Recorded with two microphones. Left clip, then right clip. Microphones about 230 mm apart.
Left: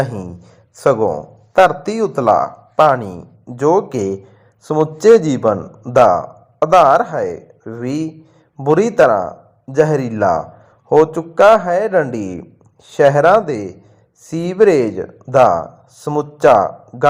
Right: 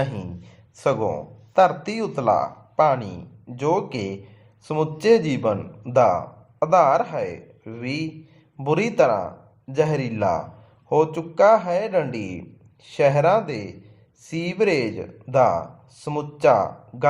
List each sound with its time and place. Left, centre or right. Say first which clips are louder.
0.0 s speech: left 6 dB; left
3.5 s speech: left 9 dB; left